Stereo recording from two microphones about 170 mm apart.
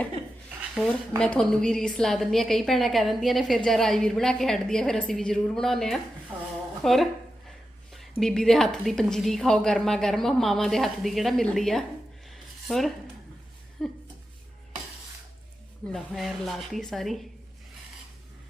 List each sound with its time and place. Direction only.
1.2 s a woman's voice: 5° left (ahead or behind)
6.3 s speech: 10° right (ahead or behind)
6.8 s a woman's voice: centre (ahead or behind)
15.9 s a woman's voice: centre (ahead or behind)